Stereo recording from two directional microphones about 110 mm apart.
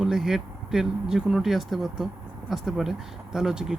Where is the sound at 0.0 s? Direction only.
5° right (ahead or behind).